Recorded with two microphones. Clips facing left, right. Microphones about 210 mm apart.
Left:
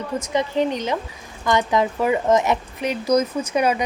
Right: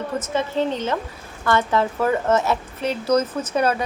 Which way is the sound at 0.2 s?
15° left (ahead or behind).